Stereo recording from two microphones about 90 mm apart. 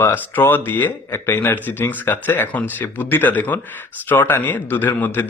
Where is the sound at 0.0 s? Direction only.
25° left (ahead or behind).